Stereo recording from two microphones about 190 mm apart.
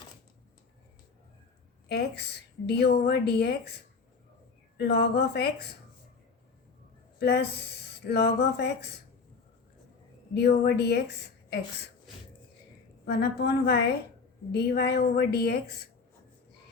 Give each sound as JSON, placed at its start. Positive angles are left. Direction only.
{"t": 1.9, "sound": "speech", "side_deg": 60}
{"t": 4.8, "sound": "speech", "side_deg": 60}
{"t": 7.2, "sound": "speech", "side_deg": 60}
{"t": 10.3, "sound": "speech", "side_deg": 60}
{"t": 13.1, "sound": "speech", "side_deg": 60}